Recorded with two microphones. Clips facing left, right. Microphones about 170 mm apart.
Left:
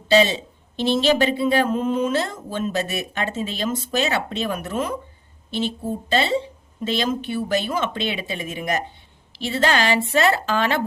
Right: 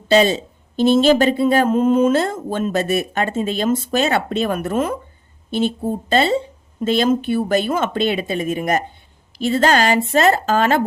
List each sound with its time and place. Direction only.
0.1 s a woman's voice: 45° right (ahead or behind)